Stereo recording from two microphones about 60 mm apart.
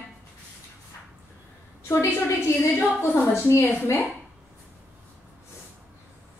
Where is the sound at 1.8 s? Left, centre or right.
Left.